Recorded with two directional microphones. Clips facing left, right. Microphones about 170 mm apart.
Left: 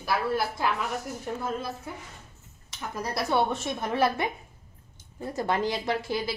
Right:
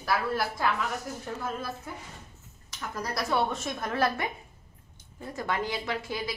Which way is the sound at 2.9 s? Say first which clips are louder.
Left 2 dB; 25° left (ahead or behind).